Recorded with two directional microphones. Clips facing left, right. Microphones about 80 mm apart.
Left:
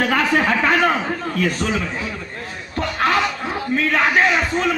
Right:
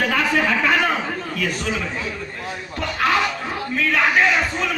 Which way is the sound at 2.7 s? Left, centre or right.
Left.